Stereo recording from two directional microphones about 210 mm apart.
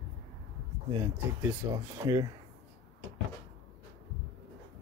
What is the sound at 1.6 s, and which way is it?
Speech, 15° right (ahead or behind).